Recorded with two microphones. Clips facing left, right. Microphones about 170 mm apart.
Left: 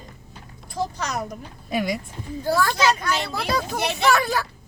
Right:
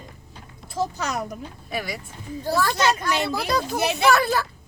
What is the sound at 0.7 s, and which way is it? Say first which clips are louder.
Speech: right 1 dB; 5° right (ahead or behind).